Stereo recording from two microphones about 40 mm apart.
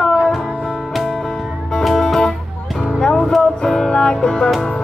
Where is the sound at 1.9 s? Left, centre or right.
Centre.